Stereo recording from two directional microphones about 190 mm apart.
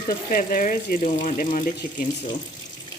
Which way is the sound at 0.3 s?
45° left (ahead or behind).